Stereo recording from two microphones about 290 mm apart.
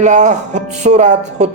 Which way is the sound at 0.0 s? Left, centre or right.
Right.